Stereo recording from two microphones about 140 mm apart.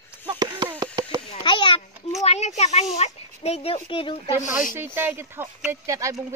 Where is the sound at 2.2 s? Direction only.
50° left (ahead or behind); by 4.3 s 35° left (ahead or behind).